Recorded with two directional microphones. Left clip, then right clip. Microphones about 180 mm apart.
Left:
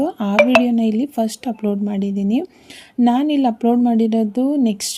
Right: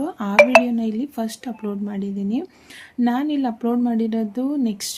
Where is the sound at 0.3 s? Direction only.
Centre (ahead or behind).